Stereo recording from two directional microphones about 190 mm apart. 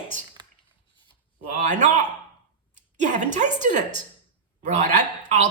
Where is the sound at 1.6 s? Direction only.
40° right (ahead or behind).